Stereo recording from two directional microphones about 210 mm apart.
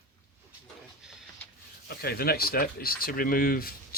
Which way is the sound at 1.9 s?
50° left (ahead or behind).